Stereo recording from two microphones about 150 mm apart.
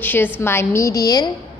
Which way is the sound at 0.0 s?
15° left (ahead or behind).